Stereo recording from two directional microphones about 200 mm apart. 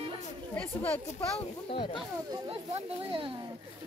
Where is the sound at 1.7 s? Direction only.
25° left (ahead or behind).